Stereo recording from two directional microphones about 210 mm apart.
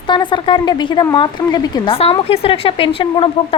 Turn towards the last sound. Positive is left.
turn(degrees=25)  # may be behind; listen again after turning